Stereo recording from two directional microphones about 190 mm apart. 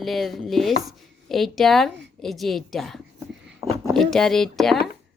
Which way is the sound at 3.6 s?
30° right (ahead or behind).